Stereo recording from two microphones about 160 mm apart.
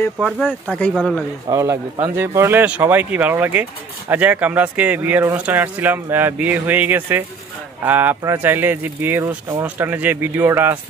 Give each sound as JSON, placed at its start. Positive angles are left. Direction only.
{"t": 0.2, "sound": "speech", "side_deg": -5}
{"t": 1.5, "sound": "a man's voice", "side_deg": -20}